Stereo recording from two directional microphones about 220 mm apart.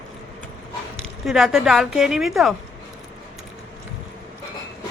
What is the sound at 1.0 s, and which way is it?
Speech, centre (ahead or behind).